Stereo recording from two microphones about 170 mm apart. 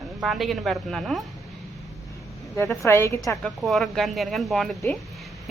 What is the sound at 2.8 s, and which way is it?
Speech, 15° left (ahead or behind).